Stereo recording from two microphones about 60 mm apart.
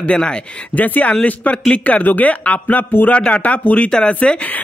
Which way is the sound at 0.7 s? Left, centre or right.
Left.